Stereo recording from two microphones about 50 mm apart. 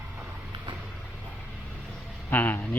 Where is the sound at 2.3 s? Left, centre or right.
Left.